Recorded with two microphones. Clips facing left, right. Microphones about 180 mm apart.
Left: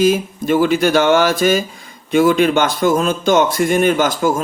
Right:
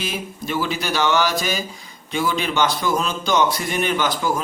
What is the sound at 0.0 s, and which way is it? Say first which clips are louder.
A man's voice: left 13 dB; 50° left (ahead or behind).